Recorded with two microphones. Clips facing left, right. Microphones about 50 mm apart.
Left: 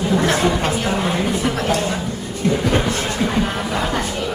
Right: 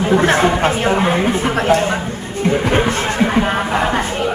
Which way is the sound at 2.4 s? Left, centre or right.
Right.